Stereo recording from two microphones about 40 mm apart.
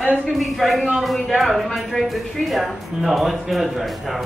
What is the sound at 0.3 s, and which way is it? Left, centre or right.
Speech, centre.